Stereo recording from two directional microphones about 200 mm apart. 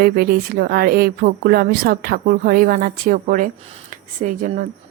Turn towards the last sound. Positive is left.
turn(degrees=-40)  # may be behind; listen again after turning